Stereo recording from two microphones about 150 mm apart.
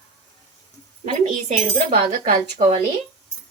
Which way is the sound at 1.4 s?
45° right (ahead or behind).